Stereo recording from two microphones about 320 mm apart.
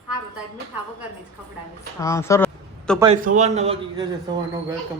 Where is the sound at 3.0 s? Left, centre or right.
Right.